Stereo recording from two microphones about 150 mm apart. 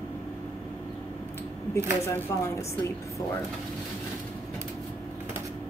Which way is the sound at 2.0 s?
20° left (ahead or behind).